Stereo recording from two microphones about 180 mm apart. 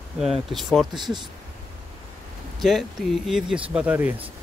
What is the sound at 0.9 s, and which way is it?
Speech, 25° right (ahead or behind).